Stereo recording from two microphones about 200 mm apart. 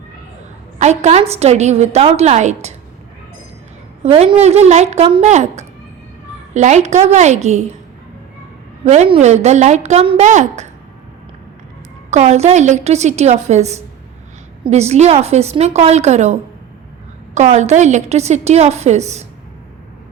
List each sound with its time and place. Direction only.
0.8 s a woman's voice: 35° right (ahead or behind)
4.0 s a woman's voice: 30° right (ahead or behind)
8.8 s a woman's voice: 35° right (ahead or behind)
12.1 s a woman's voice: 35° right (ahead or behind)